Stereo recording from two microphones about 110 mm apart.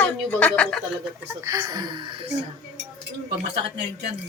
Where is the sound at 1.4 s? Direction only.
30° right (ahead or behind).